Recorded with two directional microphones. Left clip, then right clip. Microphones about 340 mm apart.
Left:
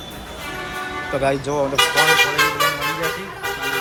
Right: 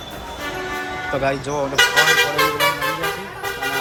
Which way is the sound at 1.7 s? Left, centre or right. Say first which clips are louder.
Right 1 dB; right.